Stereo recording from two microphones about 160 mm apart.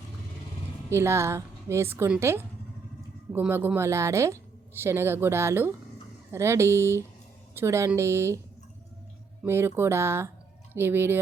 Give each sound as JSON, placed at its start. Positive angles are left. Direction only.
{"t": 0.9, "sound": "a woman's voice", "side_deg": -15}
{"t": 9.5, "sound": "a woman's voice", "side_deg": -15}